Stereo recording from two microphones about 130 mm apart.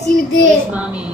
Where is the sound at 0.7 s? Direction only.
10° right (ahead or behind).